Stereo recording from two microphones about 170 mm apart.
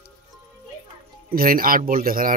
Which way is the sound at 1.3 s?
55° right (ahead or behind).